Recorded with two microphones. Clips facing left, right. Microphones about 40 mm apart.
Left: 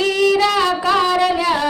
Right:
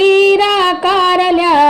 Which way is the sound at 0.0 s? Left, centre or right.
Right.